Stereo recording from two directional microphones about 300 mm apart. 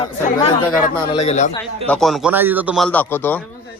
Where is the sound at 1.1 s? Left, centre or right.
Left.